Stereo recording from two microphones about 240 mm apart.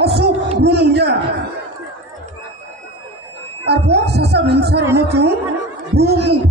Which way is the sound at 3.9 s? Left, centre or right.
Right.